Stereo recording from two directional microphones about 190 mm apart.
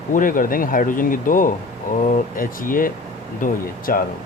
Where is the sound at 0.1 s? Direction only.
45° left (ahead or behind).